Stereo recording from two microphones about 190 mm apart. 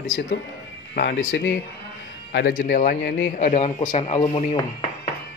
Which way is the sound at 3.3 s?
40° left (ahead or behind).